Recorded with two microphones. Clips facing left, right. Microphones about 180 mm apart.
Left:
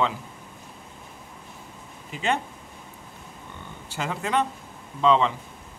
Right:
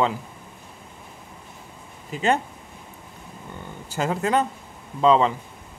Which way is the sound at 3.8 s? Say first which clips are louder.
Right 6 dB; 40° right (ahead or behind).